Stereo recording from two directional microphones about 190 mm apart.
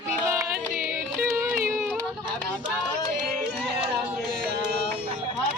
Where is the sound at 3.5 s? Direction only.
5° right (ahead or behind).